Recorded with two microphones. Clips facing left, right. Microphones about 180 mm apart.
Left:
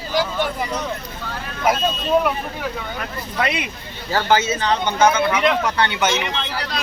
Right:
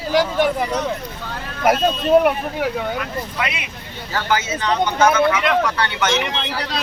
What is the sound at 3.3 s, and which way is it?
Speech, 35° left (ahead or behind).